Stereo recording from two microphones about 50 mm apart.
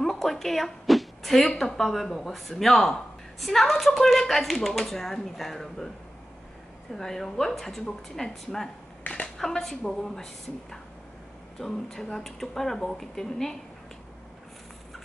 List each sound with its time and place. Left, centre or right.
0.0 s a sound: centre
1.6 s speech: centre
6.9 s speech: centre
9.0 s speech: left
9.4 s speech: centre